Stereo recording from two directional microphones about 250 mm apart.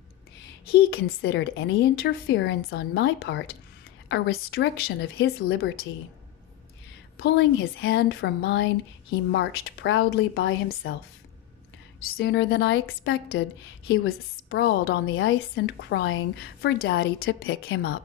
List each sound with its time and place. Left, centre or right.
0.7 s a woman's voice: left
7.2 s a woman's voice: left
12.2 s a woman's voice: left
14.5 s a woman's voice: left